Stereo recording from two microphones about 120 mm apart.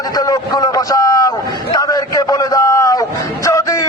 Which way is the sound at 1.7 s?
30° left (ahead or behind).